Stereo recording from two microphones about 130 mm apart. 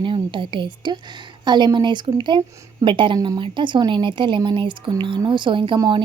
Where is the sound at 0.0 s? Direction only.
40° right (ahead or behind).